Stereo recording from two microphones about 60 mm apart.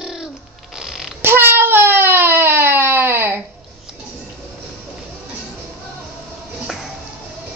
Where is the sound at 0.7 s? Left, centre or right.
Centre.